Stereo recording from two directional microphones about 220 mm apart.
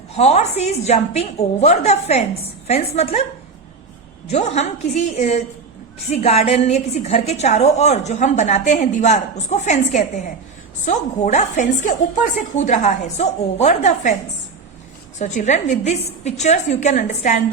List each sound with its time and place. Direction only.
0.1 s a woman's voice: 30° left (ahead or behind)
4.3 s a woman's voice: 30° left (ahead or behind)
15.2 s a woman's voice: 35° left (ahead or behind)